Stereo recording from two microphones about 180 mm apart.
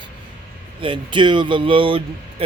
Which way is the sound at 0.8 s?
25° right (ahead or behind).